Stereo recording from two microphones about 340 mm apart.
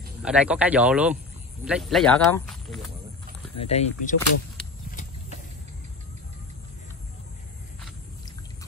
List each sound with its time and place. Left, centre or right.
0.2 s speech: centre
3.5 s speech: centre